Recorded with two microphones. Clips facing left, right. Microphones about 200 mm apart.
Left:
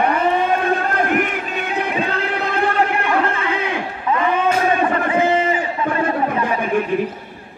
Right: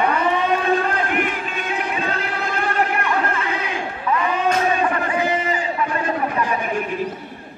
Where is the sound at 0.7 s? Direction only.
45° left (ahead or behind).